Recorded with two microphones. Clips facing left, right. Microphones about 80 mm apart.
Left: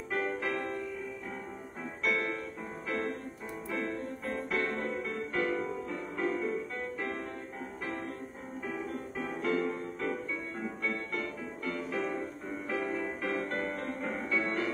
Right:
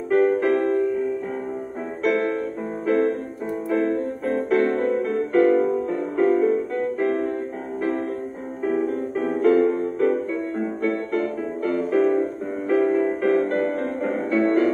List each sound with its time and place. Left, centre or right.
0.1 s music: right
2.0 s music: right
8.6 s music: right